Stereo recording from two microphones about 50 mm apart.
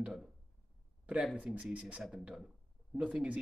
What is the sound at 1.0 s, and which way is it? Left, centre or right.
Speech, right.